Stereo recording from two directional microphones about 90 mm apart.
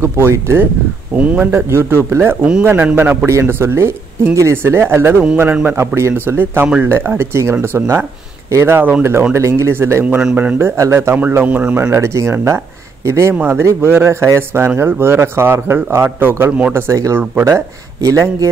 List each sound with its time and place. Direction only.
0.0 s speech: 30° right (ahead or behind)
1.1 s speech: 15° right (ahead or behind)
10.0 s speech: 15° right (ahead or behind)
10.8 s speech: 30° right (ahead or behind)
11.9 s speech: 35° right (ahead or behind)
13.3 s speech: 15° right (ahead or behind)
13.6 s speech: 25° right (ahead or behind)
16.8 s speech: 30° right (ahead or behind)